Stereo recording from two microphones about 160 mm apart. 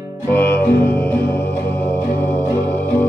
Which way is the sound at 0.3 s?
10° left (ahead or behind).